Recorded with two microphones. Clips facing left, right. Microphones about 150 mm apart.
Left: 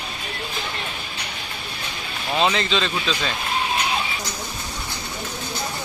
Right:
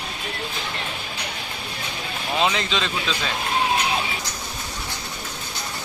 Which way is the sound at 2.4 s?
5° right (ahead or behind).